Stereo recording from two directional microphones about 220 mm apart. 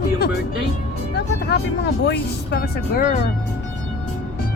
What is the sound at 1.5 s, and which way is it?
Speech, 50° left (ahead or behind).